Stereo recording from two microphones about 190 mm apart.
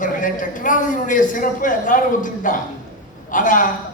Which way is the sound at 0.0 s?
45° left (ahead or behind).